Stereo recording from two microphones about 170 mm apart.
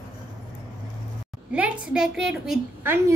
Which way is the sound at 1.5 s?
10° right (ahead or behind).